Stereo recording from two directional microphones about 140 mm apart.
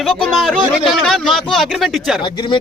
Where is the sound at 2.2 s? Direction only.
35° left (ahead or behind).